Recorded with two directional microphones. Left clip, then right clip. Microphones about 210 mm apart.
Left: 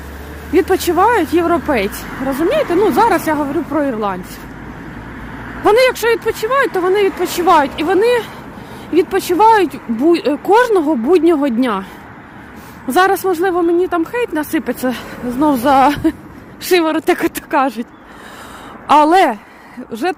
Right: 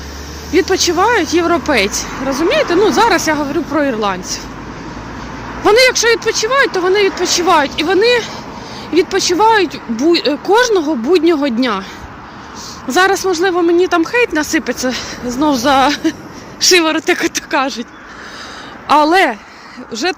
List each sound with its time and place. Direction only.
0.5 s speech: 20° left (ahead or behind)
5.6 s speech: 15° left (ahead or behind)
12.9 s speech: 15° left (ahead or behind)
18.9 s speech: 15° left (ahead or behind)